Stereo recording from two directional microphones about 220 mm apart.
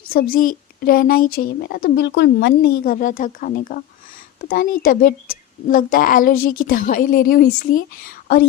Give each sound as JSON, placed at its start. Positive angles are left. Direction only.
{"t": 0.3, "sound": "speech", "side_deg": 40}